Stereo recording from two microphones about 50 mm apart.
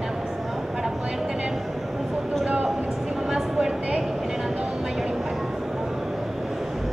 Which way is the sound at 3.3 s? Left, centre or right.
Centre.